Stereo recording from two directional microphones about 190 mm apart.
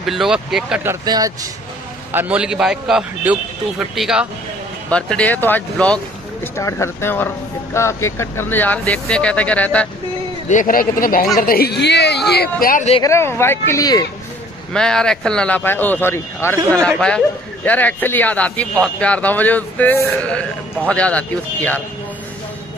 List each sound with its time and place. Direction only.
0.0 s a man's voice: centre (ahead or behind)
1.0 s speech: 20° right (ahead or behind)
2.1 s a man's voice: 5° right (ahead or behind)
10.5 s a man's voice: 45° left (ahead or behind)
13.0 s speech: 15° left (ahead or behind)
14.7 s a man's voice: 5° left (ahead or behind)